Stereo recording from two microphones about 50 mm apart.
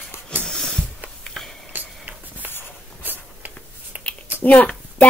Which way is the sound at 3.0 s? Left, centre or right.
Right.